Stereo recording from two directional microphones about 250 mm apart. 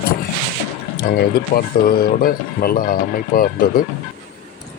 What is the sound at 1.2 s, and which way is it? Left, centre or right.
Speech, left.